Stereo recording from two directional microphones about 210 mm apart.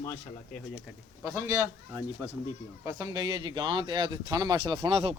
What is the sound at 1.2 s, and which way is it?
Speech, 15° right (ahead or behind).